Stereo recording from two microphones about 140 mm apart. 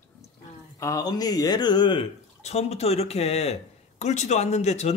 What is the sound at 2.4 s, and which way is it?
Speech, 50° left (ahead or behind).